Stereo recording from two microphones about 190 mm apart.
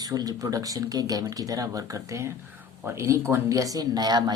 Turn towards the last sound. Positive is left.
turn(degrees=-20)  # may be behind; listen again after turning